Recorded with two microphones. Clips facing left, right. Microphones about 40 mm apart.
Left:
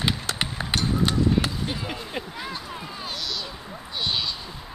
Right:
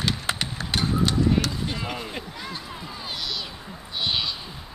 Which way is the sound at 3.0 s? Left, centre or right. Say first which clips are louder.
Right 1 dB; centre.